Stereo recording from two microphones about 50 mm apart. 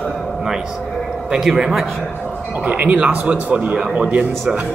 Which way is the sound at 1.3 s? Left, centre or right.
Centre.